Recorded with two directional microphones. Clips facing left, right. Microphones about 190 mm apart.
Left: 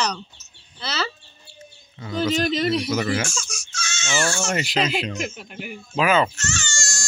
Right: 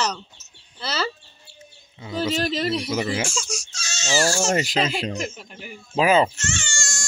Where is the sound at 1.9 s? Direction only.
10° right (ahead or behind).